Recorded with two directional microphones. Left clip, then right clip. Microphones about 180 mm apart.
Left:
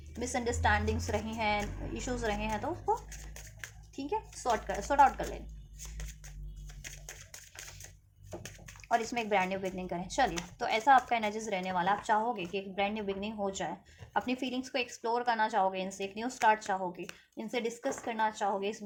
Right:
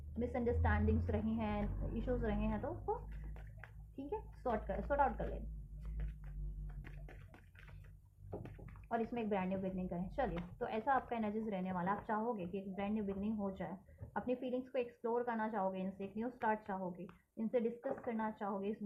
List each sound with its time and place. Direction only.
0.2 s a woman's voice: 35° left (ahead or behind)
3.9 s a woman's voice: 30° left (ahead or behind)
8.9 s a woman's voice: 40° left (ahead or behind)